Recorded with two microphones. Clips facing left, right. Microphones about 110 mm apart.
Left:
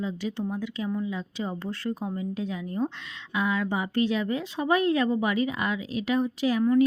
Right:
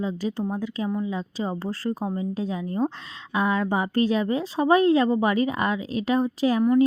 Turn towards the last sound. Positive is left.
turn(degrees=-40)  # may be behind; listen again after turning